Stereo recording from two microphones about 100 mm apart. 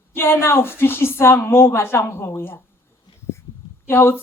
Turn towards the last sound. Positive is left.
turn(degrees=20)  # may be behind; listen again after turning